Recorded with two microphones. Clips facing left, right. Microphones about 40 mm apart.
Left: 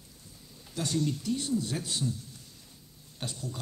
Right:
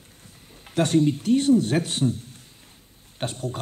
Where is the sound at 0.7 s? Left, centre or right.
Right.